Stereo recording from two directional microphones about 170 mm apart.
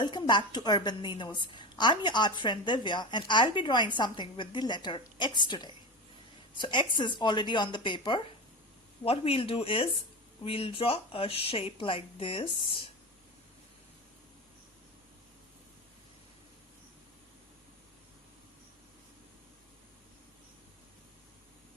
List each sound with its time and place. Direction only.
0.0 s a woman's voice: 25° left (ahead or behind)